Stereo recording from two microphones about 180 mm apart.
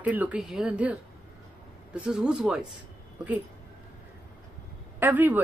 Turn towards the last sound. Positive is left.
turn(degrees=-10)  # may be behind; listen again after turning